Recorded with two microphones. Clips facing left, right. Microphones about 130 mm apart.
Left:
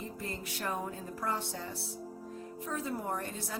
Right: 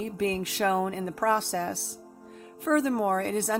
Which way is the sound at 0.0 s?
85° right.